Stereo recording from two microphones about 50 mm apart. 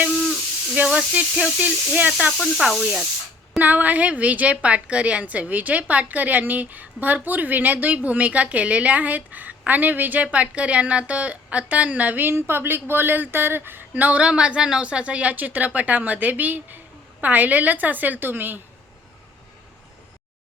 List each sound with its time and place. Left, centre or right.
0.2 s a sound: centre
1.5 s a woman's voice: right
2.4 s speech: centre
3.6 s a woman's voice: right
12.2 s speech: right
13.9 s a woman's voice: right